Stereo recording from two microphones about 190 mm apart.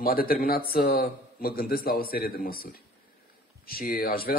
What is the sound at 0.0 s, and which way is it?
Speech, 50° left (ahead or behind).